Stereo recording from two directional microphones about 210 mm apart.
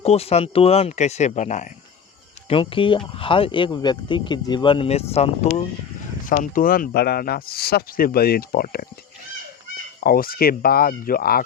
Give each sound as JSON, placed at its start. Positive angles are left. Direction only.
{"t": 0.0, "sound": "speech", "side_deg": 30}
{"t": 10.0, "sound": "speech", "side_deg": 45}